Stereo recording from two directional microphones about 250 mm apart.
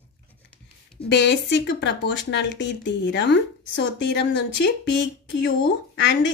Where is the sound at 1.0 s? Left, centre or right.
Left.